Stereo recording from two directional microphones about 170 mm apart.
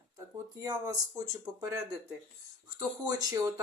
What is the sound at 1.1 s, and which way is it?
Speech, 20° right (ahead or behind).